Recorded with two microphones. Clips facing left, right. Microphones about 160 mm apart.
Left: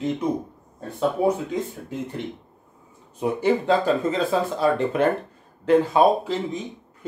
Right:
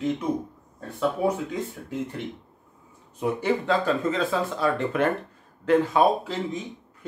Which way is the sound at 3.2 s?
25° left (ahead or behind).